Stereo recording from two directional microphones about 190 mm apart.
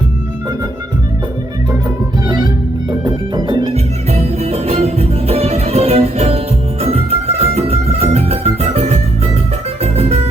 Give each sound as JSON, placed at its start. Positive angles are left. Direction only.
{"t": 2.2, "sound": "music", "side_deg": -20}
{"t": 4.1, "sound": "music", "side_deg": -35}